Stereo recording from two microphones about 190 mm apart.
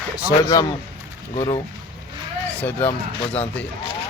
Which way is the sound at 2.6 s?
10° left (ahead or behind).